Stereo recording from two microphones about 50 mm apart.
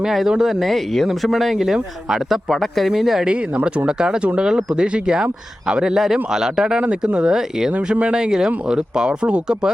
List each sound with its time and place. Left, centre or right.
0.0 s speech: centre
3.2 s a man's voice: right
7.7 s speech: right
8.1 s a man's voice: centre